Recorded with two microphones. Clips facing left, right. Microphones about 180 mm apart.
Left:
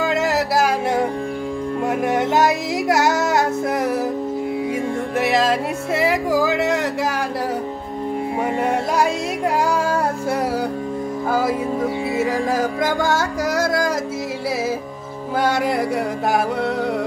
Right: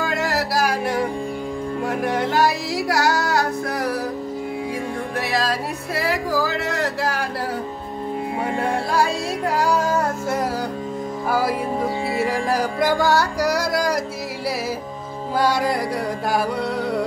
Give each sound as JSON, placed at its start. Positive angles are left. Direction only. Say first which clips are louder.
{"t": 0.0, "sound": "music", "louder": "left 3 dB", "side_deg": 20}
{"t": 5.2, "sound": "music", "louder": "left 6 dB", "side_deg": 20}
{"t": 8.5, "sound": "music", "louder": "left 1 dB", "side_deg": 20}
{"t": 13.0, "sound": "music", "louder": "right 1 dB", "side_deg": 25}
{"t": 15.3, "sound": "music", "louder": "left 1 dB", "side_deg": 25}